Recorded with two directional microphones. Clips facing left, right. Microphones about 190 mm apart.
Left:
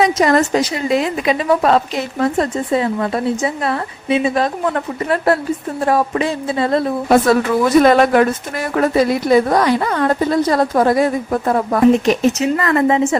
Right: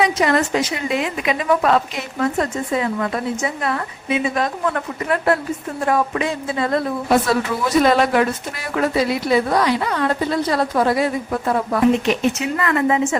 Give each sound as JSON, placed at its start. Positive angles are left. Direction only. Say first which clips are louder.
{"t": 0.0, "sound": "a woman's voice", "louder": "left 4 dB", "side_deg": 40}
{"t": 7.1, "sound": "a woman's voice", "louder": "left 5 dB", "side_deg": 50}